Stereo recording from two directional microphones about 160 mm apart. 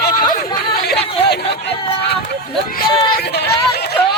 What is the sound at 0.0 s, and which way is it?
Chatter, 60° left (ahead or behind).